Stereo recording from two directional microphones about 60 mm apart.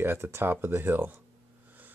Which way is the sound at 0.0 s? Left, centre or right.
Right.